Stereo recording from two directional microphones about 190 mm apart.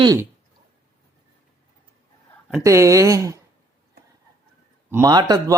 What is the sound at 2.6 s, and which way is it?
Speech, 15° right (ahead or behind).